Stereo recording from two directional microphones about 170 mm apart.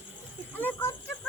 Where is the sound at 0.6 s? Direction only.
10° left (ahead or behind).